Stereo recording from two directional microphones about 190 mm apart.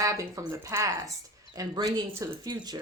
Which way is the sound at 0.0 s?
15° right (ahead or behind).